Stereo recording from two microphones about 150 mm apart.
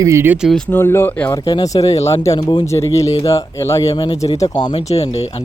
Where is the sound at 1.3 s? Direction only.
25° left (ahead or behind).